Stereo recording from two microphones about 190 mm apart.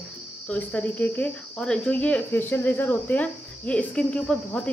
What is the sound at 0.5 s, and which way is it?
Speech, 10° left (ahead or behind).